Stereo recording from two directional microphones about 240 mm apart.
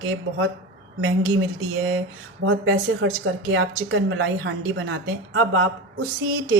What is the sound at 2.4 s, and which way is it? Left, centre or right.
A woman's voice, right.